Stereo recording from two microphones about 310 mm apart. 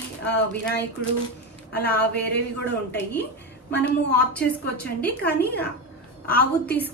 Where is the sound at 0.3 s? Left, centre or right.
Left.